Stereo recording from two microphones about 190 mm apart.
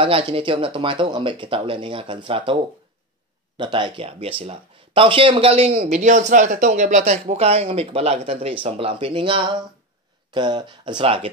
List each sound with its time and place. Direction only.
0.0 s speech: 30° right (ahead or behind)